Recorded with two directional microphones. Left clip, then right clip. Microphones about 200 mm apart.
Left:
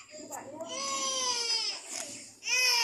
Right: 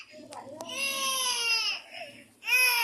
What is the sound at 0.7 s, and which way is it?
Crying, 60° right (ahead or behind).